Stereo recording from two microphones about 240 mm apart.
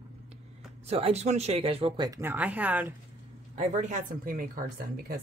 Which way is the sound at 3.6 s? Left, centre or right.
Right.